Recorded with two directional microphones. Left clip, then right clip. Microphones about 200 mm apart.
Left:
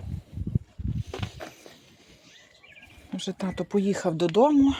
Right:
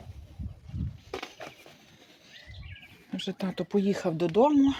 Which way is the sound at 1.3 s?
10° left (ahead or behind).